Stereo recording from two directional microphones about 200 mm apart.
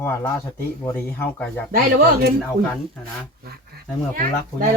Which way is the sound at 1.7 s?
55° right (ahead or behind).